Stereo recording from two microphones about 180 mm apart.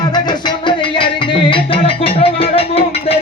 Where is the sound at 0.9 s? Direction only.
30° left (ahead or behind).